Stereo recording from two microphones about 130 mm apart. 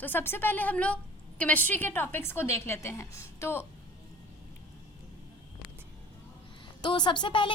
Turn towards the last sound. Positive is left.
turn(degrees=40)  # may be behind; listen again after turning